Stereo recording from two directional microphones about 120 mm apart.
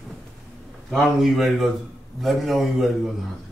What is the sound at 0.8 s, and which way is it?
A man's voice, 5° left (ahead or behind).